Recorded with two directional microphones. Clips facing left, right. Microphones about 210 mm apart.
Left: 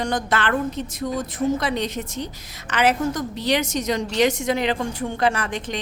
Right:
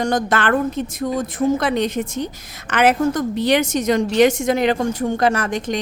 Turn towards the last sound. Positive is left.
turn(degrees=-45)  # may be behind; listen again after turning